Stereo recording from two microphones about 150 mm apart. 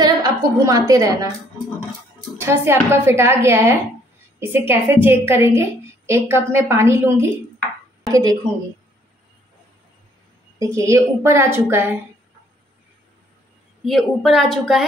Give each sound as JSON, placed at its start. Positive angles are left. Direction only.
{"t": 0.0, "sound": "a woman's voice", "side_deg": -25}
{"t": 2.4, "sound": "a woman's voice", "side_deg": -15}
{"t": 10.6, "sound": "a woman's voice", "side_deg": -20}
{"t": 13.8, "sound": "a woman's voice", "side_deg": 0}